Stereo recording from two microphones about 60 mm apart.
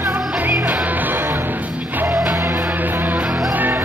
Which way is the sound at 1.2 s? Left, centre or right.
Right.